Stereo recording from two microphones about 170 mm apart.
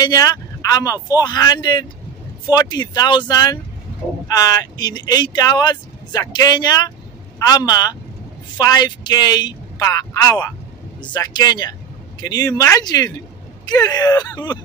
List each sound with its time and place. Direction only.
0.0 s speech: 25° left (ahead or behind)